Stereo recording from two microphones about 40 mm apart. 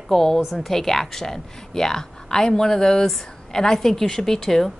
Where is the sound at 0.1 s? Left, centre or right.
Centre.